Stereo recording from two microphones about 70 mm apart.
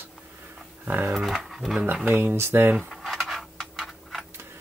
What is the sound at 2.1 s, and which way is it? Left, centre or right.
Speech, right.